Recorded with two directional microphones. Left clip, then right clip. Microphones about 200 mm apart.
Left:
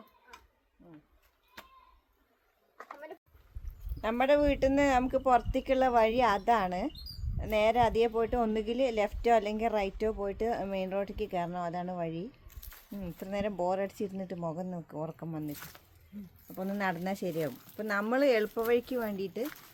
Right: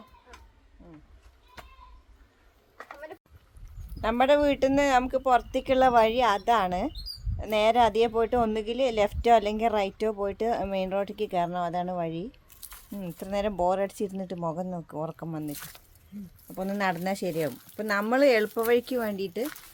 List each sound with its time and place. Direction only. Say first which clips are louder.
1.6 s a sound: right 3 dB; 25° left (ahead or behind)
4.0 s speech: right 4 dB; 15° right (ahead or behind)
12.5 s squish: right 5 dB; 5° right (ahead or behind)
13.0 s speech: right 5 dB; 15° right (ahead or behind)
15.5 s speech: right 4 dB; 5° right (ahead or behind)
16.5 s speech: right 5 dB; 15° right (ahead or behind)